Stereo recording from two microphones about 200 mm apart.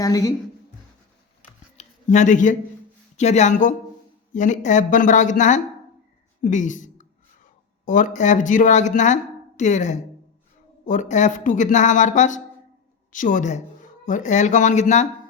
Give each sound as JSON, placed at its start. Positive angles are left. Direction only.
{"t": 0.0, "sound": "a woman's voice", "side_deg": 15}
{"t": 1.8, "sound": "speech", "side_deg": 35}